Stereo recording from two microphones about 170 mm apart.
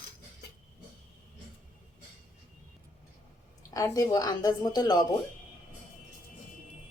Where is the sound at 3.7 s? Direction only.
20° left (ahead or behind).